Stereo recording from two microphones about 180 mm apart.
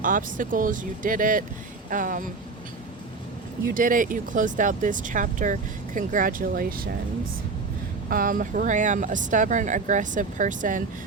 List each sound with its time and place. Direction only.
0.0 s speech: 50° right (ahead or behind)
3.8 s speech: 50° right (ahead or behind)
8.1 s speech: 50° right (ahead or behind)